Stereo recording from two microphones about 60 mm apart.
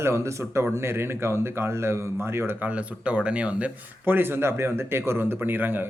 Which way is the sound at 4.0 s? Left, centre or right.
Right.